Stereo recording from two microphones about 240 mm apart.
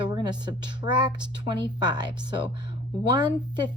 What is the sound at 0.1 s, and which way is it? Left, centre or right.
Speech, centre.